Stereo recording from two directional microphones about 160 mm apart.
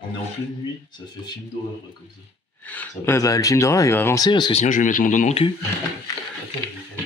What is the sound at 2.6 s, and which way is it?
Speech, 10° left (ahead or behind).